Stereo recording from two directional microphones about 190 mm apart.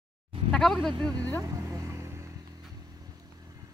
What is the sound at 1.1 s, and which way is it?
Speech, 20° right (ahead or behind).